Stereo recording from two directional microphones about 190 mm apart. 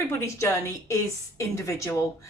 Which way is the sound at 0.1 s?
15° left (ahead or behind).